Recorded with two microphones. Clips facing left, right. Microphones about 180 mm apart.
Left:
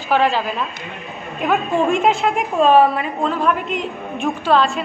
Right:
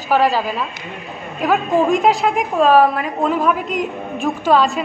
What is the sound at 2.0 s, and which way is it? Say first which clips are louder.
A woman's voice: right 1 dB; centre (ahead or behind).